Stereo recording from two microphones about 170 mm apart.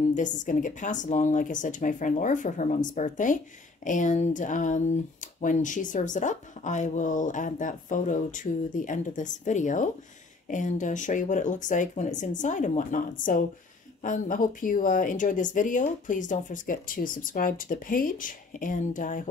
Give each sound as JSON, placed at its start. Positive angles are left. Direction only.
{"t": 0.1, "sound": "speech", "side_deg": 45}